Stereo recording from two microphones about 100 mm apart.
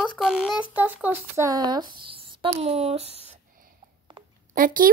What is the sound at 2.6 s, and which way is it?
Speech, 90° right.